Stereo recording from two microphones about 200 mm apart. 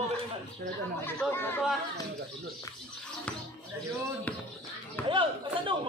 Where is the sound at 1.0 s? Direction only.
10° left (ahead or behind).